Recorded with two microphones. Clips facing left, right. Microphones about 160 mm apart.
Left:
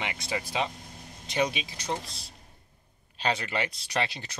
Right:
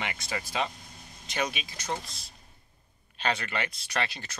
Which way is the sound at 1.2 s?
30° left (ahead or behind).